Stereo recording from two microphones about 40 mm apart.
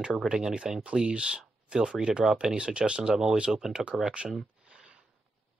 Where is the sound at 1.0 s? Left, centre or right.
Right; by 3.7 s centre.